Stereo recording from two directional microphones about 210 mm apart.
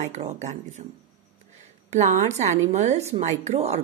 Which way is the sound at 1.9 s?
30° right (ahead or behind).